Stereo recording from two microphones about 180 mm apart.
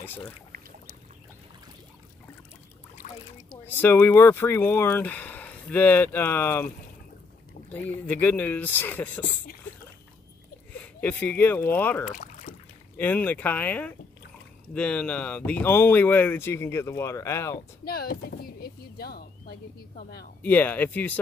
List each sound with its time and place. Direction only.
0.0 s boat: 10° left (ahead or behind)
3.0 s a sound: 50° left (ahead or behind)
3.6 s speech: 10° left (ahead or behind)
8.1 s speech: 10° left (ahead or behind)
10.7 s speech: 10° left (ahead or behind)
12.1 s boat: 45° left (ahead or behind)
12.9 s speech: 10° left (ahead or behind)
17.8 s a sound: 60° left (ahead or behind)
20.4 s speech: 10° left (ahead or behind)